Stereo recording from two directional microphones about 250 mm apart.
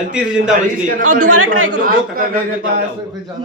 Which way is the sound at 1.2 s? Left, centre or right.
Right.